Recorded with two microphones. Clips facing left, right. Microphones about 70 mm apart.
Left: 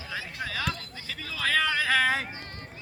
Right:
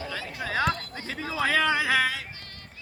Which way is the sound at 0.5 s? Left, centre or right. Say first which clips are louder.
Right 9 dB; right.